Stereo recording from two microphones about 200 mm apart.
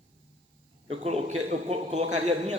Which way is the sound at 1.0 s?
30° right (ahead or behind).